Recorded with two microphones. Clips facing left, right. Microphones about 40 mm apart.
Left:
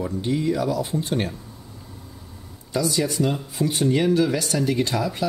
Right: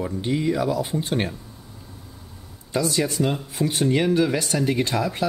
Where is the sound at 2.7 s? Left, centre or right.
Centre.